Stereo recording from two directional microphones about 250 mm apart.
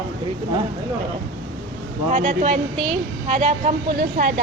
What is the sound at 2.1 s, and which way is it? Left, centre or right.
A woman's voice, right.